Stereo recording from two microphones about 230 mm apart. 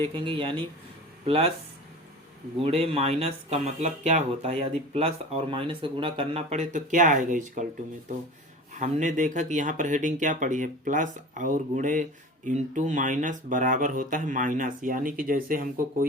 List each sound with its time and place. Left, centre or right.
0.0 s speech: right
2.6 s speech: right
8.7 s speech: right